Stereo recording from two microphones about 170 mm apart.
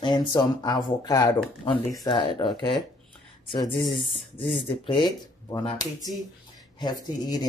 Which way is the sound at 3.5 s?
30° left (ahead or behind).